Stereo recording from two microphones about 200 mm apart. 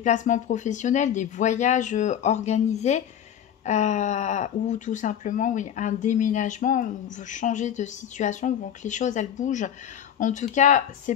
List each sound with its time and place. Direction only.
0.0 s speech: 40° left (ahead or behind)